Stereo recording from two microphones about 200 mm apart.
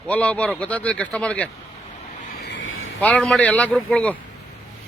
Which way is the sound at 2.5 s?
80° left.